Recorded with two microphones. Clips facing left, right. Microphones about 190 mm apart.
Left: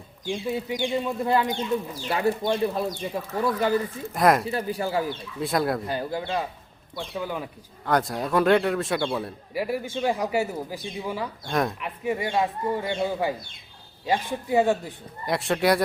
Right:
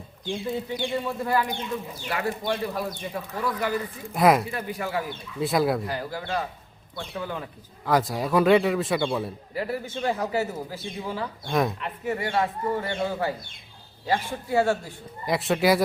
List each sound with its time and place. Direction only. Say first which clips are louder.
0.3 s a man's voice: left 1 dB; 10° left (ahead or behind); by 3.8 s 30° left (ahead or behind)
4.1 s a man's voice: right 1 dB; centre (ahead or behind)
4.4 s a man's voice: left 4 dB; 30° left (ahead or behind)
5.4 s a man's voice: right 2 dB; centre (ahead or behind)
5.8 s a man's voice: left 3 dB; 25° left (ahead or behind)
7.1 s speech: left 2 dB; 10° left (ahead or behind)
7.9 s a man's voice: right 1 dB; centre (ahead or behind)
9.6 s speech: left 2 dB; 10° left (ahead or behind)
11.4 s a man's voice: right 1 dB; centre (ahead or behind)
11.8 s speech: left 1 dB; 15° left (ahead or behind)
15.3 s a man's voice: right 1 dB; centre (ahead or behind)